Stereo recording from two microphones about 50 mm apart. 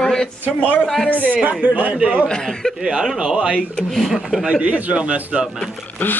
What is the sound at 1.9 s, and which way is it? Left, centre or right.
Speech, centre.